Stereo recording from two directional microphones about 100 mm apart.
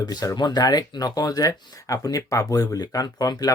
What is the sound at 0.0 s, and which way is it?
Speech, 45° left (ahead or behind).